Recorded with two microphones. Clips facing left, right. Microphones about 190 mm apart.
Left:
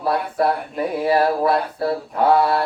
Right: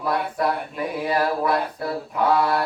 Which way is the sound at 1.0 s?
30° left (ahead or behind).